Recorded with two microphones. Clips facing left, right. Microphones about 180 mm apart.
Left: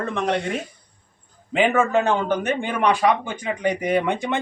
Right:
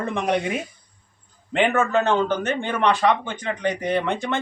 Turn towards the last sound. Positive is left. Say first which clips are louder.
# left 2 dB
turn(degrees=15)  # may be behind; listen again after turning